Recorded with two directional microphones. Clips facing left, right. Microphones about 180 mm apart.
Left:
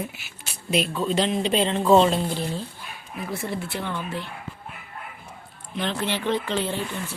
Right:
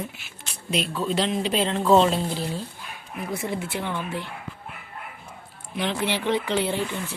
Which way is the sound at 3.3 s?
20° right (ahead or behind).